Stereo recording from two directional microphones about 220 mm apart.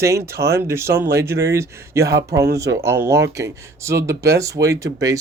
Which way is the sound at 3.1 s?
10° right (ahead or behind).